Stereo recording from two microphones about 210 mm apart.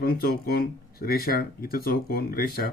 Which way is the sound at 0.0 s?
45° left (ahead or behind).